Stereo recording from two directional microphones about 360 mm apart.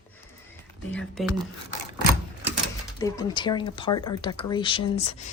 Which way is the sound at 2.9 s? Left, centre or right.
Centre.